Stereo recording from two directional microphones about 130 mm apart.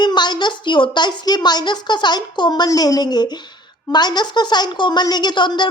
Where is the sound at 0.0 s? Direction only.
35° left (ahead or behind).